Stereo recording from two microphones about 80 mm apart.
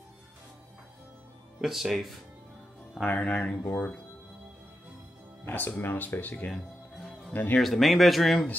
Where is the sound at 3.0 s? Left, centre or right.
Centre.